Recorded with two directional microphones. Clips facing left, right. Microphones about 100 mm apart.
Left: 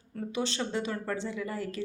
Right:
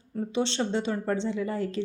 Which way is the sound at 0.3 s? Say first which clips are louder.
Right 4 dB; 30° right (ahead or behind).